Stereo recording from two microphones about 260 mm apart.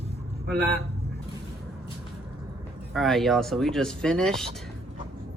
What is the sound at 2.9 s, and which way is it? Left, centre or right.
Speech, centre.